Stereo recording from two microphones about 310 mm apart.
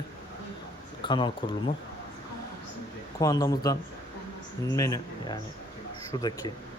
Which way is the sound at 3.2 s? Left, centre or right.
Centre.